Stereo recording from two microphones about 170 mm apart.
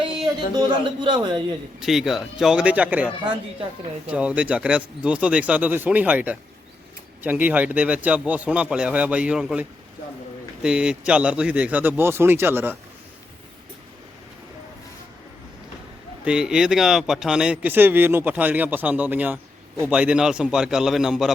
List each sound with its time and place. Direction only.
0.5 s a man's voice: 25° right (ahead or behind)
1.8 s a man's voice: centre (ahead or behind)
16.2 s a man's voice: 5° right (ahead or behind)